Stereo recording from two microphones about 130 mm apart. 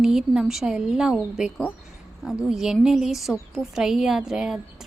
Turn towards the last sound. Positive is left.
turn(degrees=-5)  # may be behind; listen again after turning